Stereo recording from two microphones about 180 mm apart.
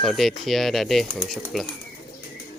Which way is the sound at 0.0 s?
Centre (ahead or behind).